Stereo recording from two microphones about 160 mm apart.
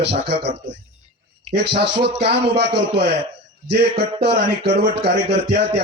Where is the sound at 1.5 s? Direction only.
90° right.